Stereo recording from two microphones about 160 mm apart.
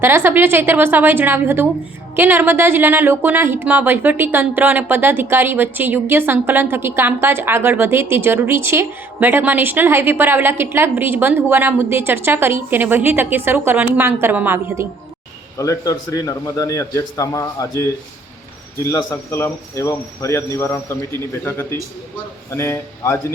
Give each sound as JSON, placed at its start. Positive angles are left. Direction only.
{"t": 0.0, "sound": "a woman's voice", "side_deg": -15}
{"t": 15.5, "sound": "a man's voice", "side_deg": 20}
{"t": 18.9, "sound": "speech", "side_deg": 20}